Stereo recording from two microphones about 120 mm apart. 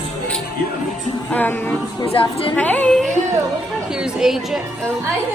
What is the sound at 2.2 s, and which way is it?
Speech, 45° left (ahead or behind).